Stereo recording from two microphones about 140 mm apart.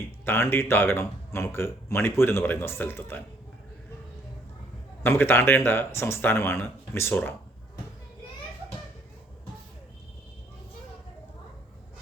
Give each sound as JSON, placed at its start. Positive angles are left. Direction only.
{"t": 0.3, "sound": "speech", "side_deg": 15}
{"t": 5.0, "sound": "speech", "side_deg": 15}